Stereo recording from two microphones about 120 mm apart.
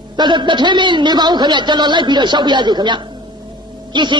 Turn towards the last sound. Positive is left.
turn(degrees=-40)  # may be behind; listen again after turning